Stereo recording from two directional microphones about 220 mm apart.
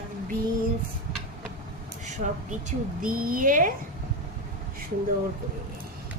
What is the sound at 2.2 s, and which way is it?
Speech, 30° right (ahead or behind).